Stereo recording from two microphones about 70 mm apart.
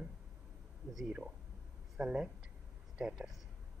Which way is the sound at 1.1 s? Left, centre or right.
Centre.